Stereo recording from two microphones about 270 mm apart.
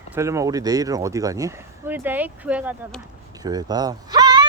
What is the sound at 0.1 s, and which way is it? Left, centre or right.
Speech, centre.